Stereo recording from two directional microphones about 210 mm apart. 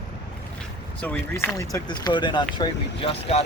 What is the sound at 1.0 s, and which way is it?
Speech, 10° left (ahead or behind).